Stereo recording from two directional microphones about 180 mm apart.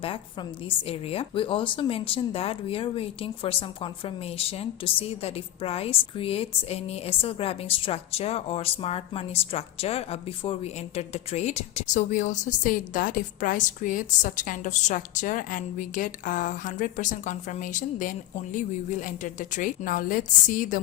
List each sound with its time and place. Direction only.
0.8 s speech: 35° left (ahead or behind)